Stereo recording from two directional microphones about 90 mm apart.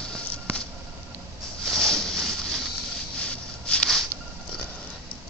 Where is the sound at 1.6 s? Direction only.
5° left (ahead or behind).